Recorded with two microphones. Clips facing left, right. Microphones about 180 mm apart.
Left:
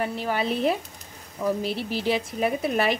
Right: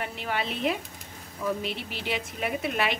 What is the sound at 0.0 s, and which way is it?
Speech, 40° left (ahead or behind).